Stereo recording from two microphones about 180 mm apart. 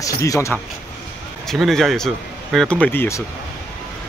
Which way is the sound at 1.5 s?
Centre (ahead or behind).